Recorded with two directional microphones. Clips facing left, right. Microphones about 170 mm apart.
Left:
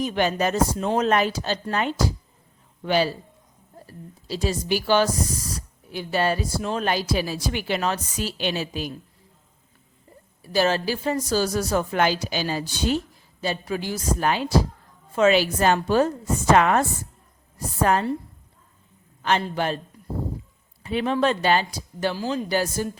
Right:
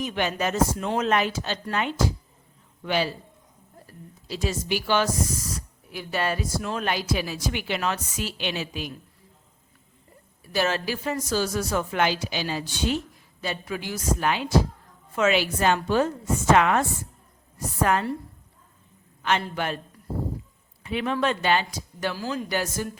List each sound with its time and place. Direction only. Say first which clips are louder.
0.0 s speech: left 4 dB; 35° left (ahead or behind)
4.3 s speech: left 3 dB; 35° left (ahead or behind)
10.4 s speech: left 4 dB; 30° left (ahead or behind)
17.8 s speech: left 2 dB; 35° left (ahead or behind)
19.2 s speech: left 3 dB; 35° left (ahead or behind)
20.8 s speech: left 3 dB; 35° left (ahead or behind)